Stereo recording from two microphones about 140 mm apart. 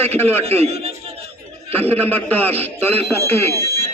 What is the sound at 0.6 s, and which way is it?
Speech, 45° right (ahead or behind).